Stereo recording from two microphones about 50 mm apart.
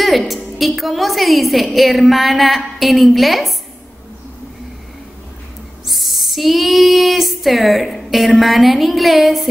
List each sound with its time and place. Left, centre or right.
0.3 s a woman's voice: centre
5.9 s child singing: centre
8.4 s a woman's voice: centre